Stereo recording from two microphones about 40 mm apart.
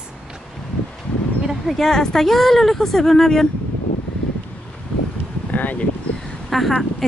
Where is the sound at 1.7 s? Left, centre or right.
Centre.